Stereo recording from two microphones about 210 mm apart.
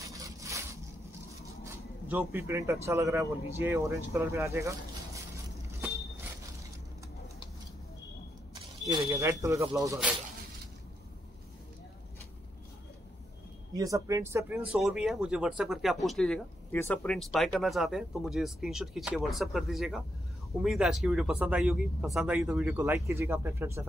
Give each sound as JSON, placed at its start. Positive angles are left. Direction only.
{"t": 0.1, "sound": "a sound", "side_deg": -15}
{"t": 1.4, "sound": "speech", "side_deg": -10}
{"t": 8.8, "sound": "speech", "side_deg": -15}
{"t": 13.7, "sound": "speech", "side_deg": -15}